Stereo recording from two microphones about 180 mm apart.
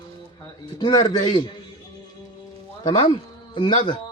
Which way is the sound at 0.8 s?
25° left (ahead or behind).